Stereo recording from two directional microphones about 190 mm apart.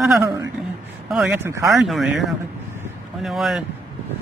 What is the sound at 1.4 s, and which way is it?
Speech, 15° right (ahead or behind).